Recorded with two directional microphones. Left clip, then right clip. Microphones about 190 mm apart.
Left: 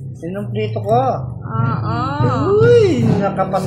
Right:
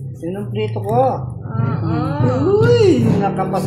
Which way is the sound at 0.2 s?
35° left (ahead or behind).